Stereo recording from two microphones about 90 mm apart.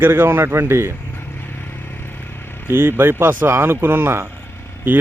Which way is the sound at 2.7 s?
25° right (ahead or behind).